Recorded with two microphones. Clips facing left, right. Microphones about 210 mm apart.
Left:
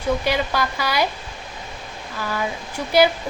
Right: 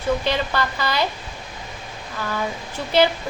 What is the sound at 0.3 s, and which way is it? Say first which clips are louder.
Speech: left 1 dB; 10° left (ahead or behind).